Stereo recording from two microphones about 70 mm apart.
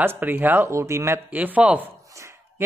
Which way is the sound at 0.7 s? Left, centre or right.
Right.